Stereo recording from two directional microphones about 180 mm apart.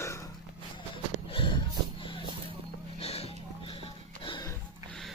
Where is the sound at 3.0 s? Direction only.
35° left (ahead or behind).